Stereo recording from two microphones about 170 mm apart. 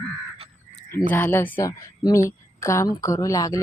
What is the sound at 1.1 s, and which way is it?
A woman's voice, 10° left (ahead or behind).